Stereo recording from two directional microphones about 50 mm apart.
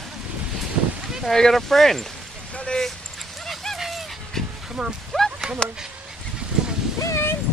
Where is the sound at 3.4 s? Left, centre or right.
Centre.